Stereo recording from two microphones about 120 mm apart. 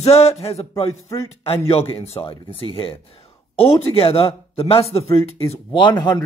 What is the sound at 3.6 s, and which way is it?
Speech, 55° left (ahead or behind).